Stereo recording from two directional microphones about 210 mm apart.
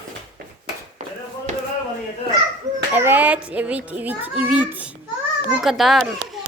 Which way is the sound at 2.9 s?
10° right (ahead or behind).